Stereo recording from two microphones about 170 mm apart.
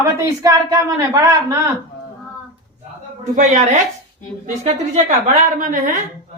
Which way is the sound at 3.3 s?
45° right (ahead or behind).